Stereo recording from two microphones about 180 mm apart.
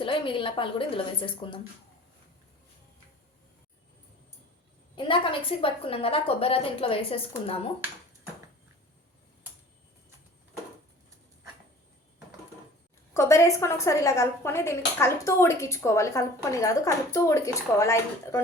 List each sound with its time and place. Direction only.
0.0 s a woman's voice: 30° left (ahead or behind)
4.9 s a woman's voice: 25° left (ahead or behind)
13.1 s a woman's voice: 15° left (ahead or behind)